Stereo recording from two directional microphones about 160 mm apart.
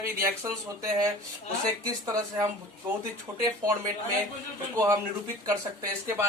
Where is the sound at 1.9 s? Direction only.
20° right (ahead or behind).